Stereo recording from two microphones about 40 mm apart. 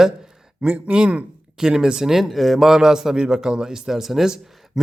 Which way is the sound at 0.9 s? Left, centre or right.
Right.